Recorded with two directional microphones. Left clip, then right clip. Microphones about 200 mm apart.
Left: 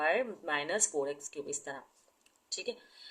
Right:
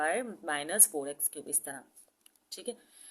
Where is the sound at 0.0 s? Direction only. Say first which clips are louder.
Left 1 dB; 25° right (ahead or behind).